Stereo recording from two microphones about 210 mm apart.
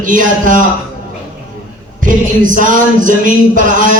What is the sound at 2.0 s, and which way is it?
A man's voice, 40° right (ahead or behind).